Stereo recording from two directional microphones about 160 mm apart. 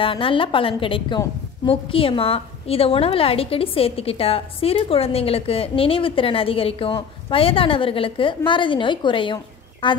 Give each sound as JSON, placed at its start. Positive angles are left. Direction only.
{"t": 0.0, "sound": "a woman's voice", "side_deg": 35}